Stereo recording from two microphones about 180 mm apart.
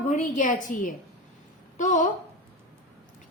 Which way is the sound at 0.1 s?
45° left (ahead or behind).